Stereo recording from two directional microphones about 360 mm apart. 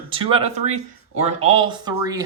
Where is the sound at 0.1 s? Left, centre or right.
Centre.